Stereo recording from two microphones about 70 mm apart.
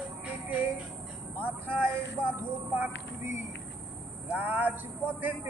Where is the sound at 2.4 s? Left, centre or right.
Right.